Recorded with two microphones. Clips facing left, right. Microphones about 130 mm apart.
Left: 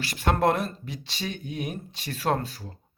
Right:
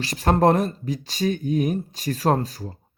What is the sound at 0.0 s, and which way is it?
Speech, 35° right (ahead or behind).